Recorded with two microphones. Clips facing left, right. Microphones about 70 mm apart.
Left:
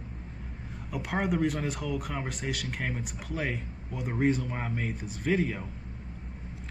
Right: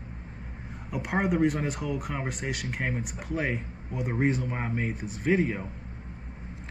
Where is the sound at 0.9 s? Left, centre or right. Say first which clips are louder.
Right 2 dB; centre.